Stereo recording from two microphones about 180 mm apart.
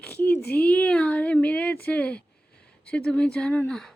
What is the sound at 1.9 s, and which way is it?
Speech, 5° left (ahead or behind).